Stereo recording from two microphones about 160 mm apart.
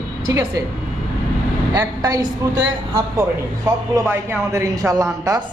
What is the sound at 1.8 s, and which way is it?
Speech, 20° right (ahead or behind).